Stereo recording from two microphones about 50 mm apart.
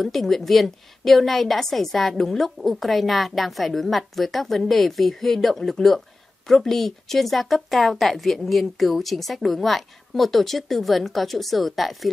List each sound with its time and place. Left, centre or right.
0.0 s a woman's voice: centre